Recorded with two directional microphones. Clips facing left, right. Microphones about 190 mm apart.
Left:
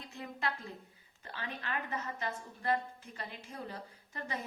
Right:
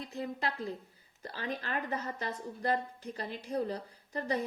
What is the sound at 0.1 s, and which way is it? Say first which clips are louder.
A woman's voice: right 1 dB; 35° right (ahead or behind).